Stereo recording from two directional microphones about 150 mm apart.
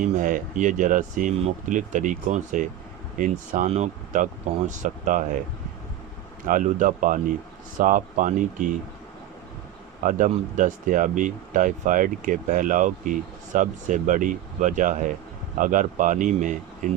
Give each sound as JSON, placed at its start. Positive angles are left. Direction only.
{"t": 0.0, "sound": "speech", "side_deg": -60}
{"t": 6.5, "sound": "speech", "side_deg": -60}
{"t": 10.0, "sound": "speech", "side_deg": -60}